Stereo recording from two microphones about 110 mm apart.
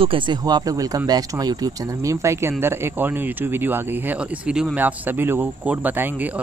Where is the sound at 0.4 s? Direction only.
40° right (ahead or behind).